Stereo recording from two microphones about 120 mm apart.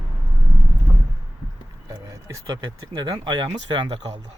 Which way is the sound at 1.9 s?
30° right (ahead or behind).